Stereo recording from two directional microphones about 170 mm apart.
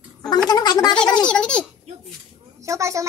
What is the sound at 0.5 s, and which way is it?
Gargling, 25° left (ahead or behind).